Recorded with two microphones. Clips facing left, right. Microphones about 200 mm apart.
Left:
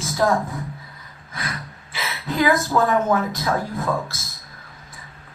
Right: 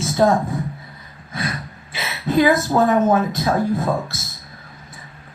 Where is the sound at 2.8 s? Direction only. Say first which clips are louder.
Right 4 dB; 20° right (ahead or behind).